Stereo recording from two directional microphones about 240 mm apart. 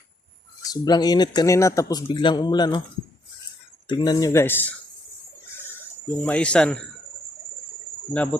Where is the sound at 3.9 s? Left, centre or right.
Centre.